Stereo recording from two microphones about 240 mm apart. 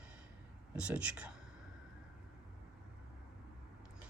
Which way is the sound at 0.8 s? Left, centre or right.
Centre.